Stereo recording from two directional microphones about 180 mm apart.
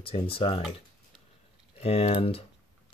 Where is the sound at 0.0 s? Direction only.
30° left (ahead or behind).